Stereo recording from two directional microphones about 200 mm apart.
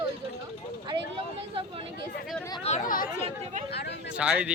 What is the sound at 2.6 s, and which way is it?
Speech, 35° left (ahead or behind).